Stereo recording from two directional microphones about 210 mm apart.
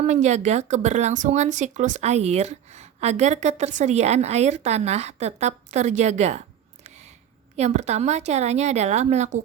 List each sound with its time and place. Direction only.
0.0 s speech: 35° right (ahead or behind)
6.8 s a sound: 35° right (ahead or behind)
7.5 s speech: 30° right (ahead or behind)